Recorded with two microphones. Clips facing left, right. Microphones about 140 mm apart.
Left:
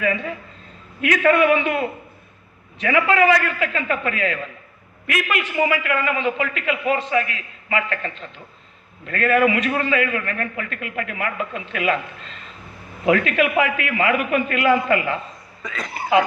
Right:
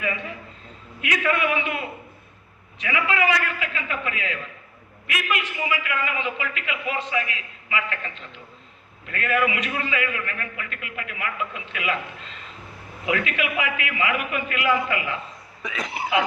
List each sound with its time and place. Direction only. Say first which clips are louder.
1.0 s a man's voice: left 8 dB; 45° left (ahead or behind)
13.1 s a man's voice: left 7 dB; 45° left (ahead or behind)
15.6 s speech: even; 10° right (ahead or behind)